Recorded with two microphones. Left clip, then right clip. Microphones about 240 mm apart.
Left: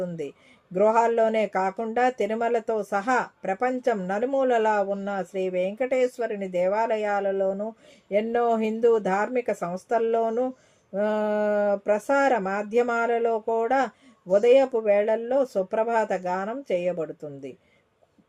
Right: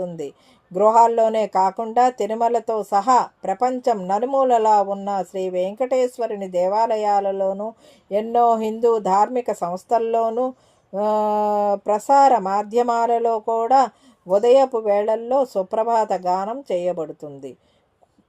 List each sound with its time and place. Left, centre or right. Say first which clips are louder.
0.7 s speech: right 6 dB; right